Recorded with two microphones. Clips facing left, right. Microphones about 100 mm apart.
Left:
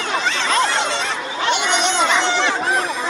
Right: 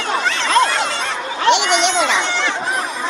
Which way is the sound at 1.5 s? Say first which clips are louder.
Right 5 dB; 90° right.